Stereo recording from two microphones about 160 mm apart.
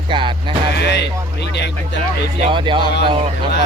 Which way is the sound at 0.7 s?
90° left.